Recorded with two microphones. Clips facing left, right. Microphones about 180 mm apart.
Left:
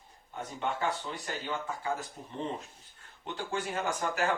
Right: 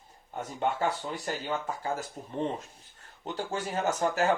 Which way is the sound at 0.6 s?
40° right (ahead or behind).